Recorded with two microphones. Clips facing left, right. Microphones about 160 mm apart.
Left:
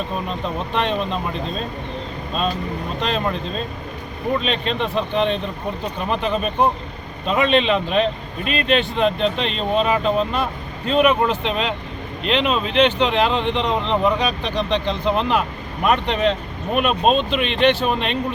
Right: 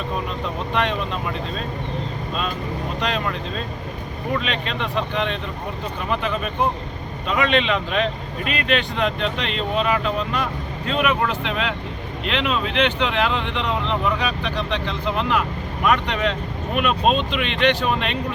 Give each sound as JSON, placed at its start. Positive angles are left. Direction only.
{"t": 3.0, "sound": "speech", "side_deg": 25}